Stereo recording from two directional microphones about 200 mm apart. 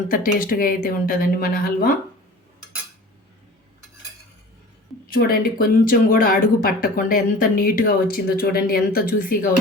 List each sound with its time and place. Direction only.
0.1 s speech: 45° left (ahead or behind)
5.1 s speech: 50° left (ahead or behind)